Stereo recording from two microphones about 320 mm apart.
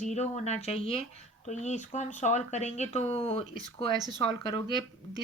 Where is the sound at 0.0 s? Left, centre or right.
Left.